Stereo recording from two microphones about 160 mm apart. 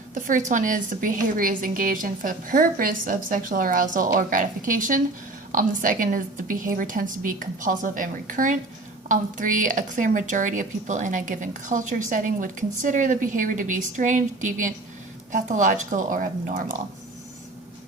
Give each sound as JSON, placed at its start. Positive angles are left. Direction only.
{"t": 0.1, "sound": "a woman's voice", "side_deg": -55}